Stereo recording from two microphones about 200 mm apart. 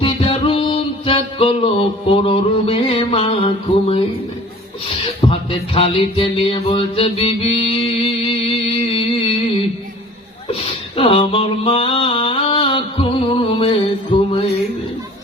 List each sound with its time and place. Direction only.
0.0 s music: 25° left (ahead or behind)
5.3 s music: 30° left (ahead or behind)
10.9 s mantra: 25° left (ahead or behind)